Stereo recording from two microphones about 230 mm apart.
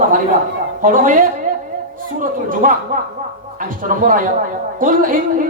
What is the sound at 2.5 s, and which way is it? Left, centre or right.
A man's voice, right.